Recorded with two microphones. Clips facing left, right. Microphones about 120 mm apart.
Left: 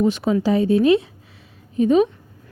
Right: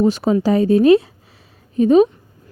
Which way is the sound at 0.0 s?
40° right (ahead or behind).